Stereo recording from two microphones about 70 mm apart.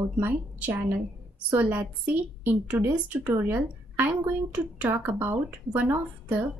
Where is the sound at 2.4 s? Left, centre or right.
Right.